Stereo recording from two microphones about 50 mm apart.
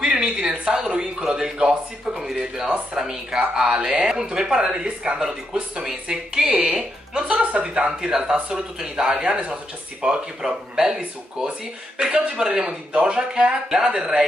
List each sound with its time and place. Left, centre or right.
0.0 s speech: centre
12.0 s speech: centre